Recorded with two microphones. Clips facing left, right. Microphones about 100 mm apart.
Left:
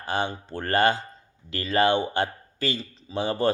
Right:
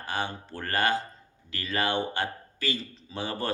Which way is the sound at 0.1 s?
25° left (ahead or behind).